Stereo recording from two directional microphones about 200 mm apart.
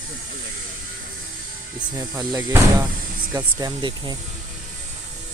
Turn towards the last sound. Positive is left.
turn(degrees=-20)  # may be behind; listen again after turning